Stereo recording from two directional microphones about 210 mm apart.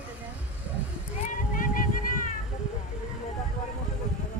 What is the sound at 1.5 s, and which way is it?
Music, 40° left (ahead or behind).